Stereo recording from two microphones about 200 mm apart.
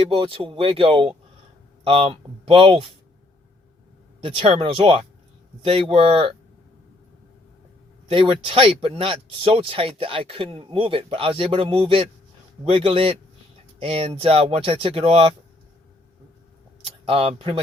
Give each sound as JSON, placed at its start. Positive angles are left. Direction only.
{"t": 0.1, "sound": "speech", "side_deg": -25}
{"t": 4.2, "sound": "speech", "side_deg": -25}
{"t": 8.1, "sound": "speech", "side_deg": -25}
{"t": 17.1, "sound": "speech", "side_deg": -30}